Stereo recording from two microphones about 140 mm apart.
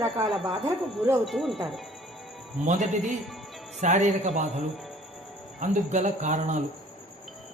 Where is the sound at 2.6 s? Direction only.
60° right (ahead or behind).